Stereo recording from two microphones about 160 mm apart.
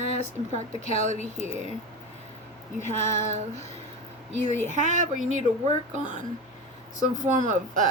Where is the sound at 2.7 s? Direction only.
45° left (ahead or behind).